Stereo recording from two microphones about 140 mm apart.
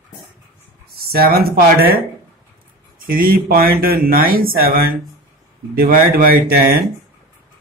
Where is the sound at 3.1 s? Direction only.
90° right.